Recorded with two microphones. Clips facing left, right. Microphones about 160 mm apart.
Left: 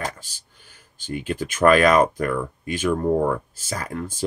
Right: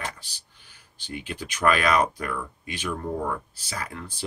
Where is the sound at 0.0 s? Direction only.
45° left (ahead or behind).